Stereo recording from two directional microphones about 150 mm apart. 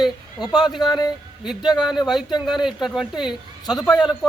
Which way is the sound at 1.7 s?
Centre (ahead or behind).